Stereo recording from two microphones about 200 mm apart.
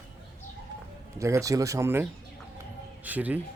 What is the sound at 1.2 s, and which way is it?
Speech, 15° right (ahead or behind).